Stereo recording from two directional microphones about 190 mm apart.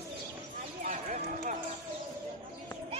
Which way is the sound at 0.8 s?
45° right (ahead or behind).